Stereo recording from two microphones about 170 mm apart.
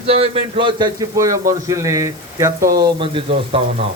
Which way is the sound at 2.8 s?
30° right (ahead or behind).